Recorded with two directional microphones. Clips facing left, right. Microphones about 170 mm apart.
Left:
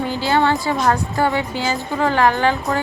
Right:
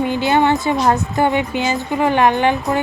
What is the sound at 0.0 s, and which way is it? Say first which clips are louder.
Speech: right 3 dB; 20° right (ahead or behind).